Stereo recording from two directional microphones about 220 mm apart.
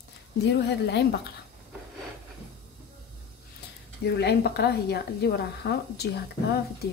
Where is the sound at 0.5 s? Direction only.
50° left (ahead or behind).